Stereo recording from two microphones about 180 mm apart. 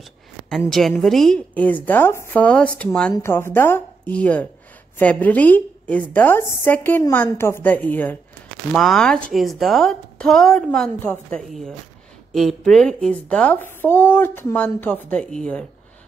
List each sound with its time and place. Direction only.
0.7 s a woman's voice: centre (ahead or behind)